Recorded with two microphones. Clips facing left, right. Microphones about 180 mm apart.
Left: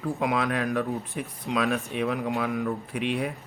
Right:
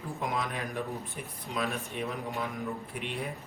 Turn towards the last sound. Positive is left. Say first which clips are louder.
# left 8 dB
turn(degrees=85)